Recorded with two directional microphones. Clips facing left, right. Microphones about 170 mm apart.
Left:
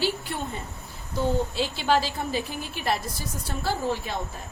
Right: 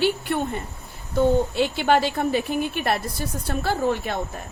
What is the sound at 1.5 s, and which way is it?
A woman's voice, 60° right (ahead or behind).